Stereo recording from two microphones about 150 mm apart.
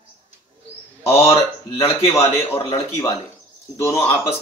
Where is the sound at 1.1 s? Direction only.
40° left (ahead or behind).